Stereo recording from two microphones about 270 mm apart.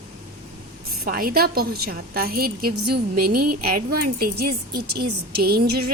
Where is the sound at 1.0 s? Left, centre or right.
Right.